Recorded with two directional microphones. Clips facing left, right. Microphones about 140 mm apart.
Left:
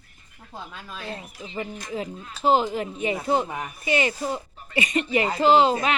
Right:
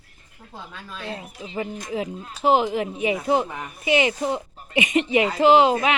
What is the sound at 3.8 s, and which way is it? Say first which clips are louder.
Speech: right 4 dB; 15° right (ahead or behind).